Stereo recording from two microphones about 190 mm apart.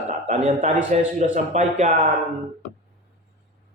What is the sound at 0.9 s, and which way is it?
A man's voice, 40° right (ahead or behind).